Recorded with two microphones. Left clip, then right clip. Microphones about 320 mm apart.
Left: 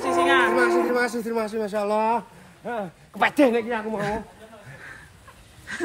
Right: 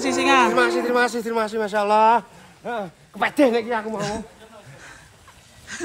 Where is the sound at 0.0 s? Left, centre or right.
Centre.